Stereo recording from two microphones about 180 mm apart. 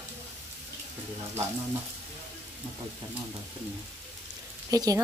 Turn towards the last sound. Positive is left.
turn(degrees=-20)  # may be behind; listen again after turning